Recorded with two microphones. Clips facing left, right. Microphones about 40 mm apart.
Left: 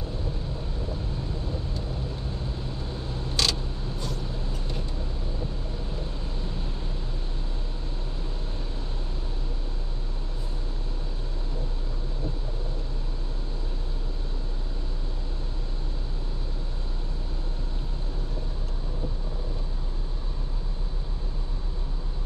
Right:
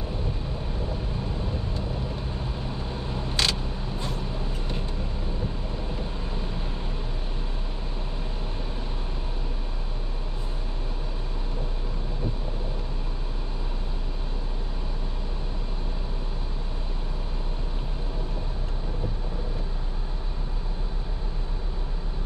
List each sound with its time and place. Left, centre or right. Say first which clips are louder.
3.1 s vehicle: right 1 dB; right